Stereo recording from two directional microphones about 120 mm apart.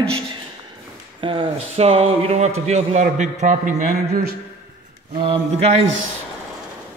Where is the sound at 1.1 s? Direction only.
45° right (ahead or behind); by 3.9 s 90° right.